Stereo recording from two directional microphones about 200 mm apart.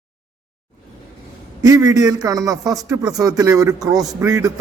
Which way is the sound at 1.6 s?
20° right (ahead or behind).